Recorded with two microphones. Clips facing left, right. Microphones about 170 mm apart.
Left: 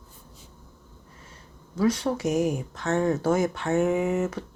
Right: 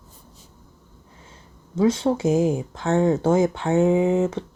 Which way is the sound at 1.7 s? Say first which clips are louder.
Right 4 dB; 25° right (ahead or behind).